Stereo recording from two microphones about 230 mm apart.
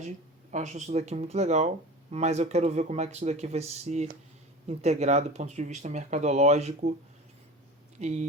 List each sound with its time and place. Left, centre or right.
0.5 s speech: right
7.9 s speech: right